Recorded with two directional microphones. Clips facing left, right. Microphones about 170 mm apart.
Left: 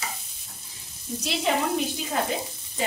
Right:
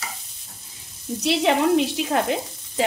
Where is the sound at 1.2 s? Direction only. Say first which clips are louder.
Right 7 dB; 70° right (ahead or behind).